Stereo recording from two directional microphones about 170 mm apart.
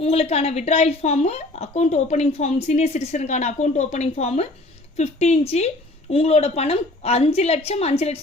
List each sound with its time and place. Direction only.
0.0 s a woman's voice: 35° left (ahead or behind)